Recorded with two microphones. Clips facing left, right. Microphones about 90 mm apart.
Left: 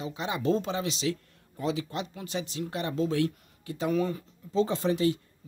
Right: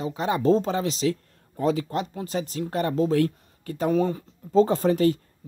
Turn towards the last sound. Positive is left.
turn(degrees=-45)  # may be behind; listen again after turning